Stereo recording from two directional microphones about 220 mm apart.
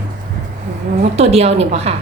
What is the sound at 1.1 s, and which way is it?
Speech, 30° right (ahead or behind).